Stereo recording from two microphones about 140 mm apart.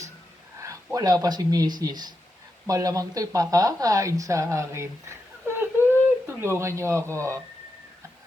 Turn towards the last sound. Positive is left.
turn(degrees=-20)  # may be behind; listen again after turning